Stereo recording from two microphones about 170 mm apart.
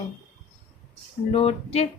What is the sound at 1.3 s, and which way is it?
Speech, 35° left (ahead or behind).